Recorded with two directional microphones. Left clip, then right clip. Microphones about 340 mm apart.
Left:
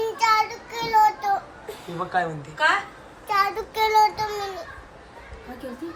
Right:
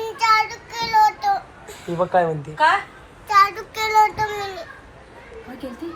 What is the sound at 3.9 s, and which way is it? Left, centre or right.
Child singing, centre.